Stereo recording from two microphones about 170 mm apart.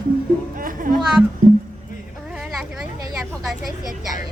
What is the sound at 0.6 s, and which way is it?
Music, 55° right (ahead or behind).